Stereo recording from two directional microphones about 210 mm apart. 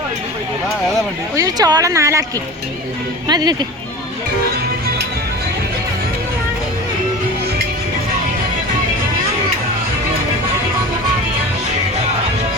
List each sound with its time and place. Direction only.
1.4 s speech: 20° right (ahead or behind)
3.2 s speech: 20° right (ahead or behind)